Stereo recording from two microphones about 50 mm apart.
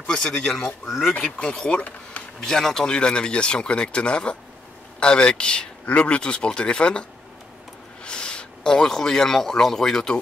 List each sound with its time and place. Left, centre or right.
0.0 s a man's voice: centre
0.8 s speech: centre
1.1 s speech: left
2.4 s speech: centre